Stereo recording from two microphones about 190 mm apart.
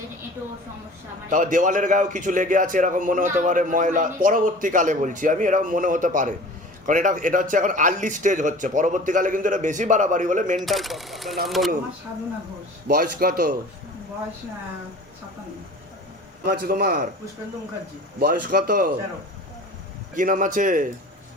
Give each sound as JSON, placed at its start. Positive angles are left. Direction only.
{"t": 1.3, "sound": "a man's voice", "side_deg": -45}
{"t": 10.6, "sound": "speech", "side_deg": 0}
{"t": 12.9, "sound": "a man's voice", "side_deg": -50}
{"t": 16.5, "sound": "a man's voice", "side_deg": -50}
{"t": 18.2, "sound": "a man's voice", "side_deg": -45}
{"t": 20.1, "sound": "a man's voice", "side_deg": -45}